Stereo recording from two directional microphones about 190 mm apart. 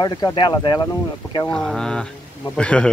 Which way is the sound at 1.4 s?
5° left (ahead or behind).